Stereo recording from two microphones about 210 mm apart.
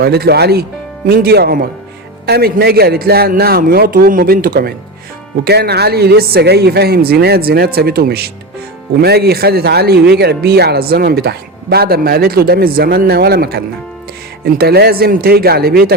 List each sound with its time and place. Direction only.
0.0 s speech: 50° right (ahead or behind)